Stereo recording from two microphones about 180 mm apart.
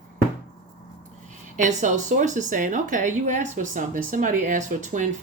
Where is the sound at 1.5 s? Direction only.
45° right (ahead or behind).